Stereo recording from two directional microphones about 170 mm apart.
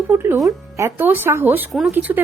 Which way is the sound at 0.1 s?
15° right (ahead or behind).